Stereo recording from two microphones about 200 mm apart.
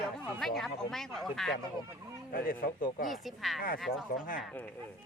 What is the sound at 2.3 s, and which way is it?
Speech, 45° left (ahead or behind).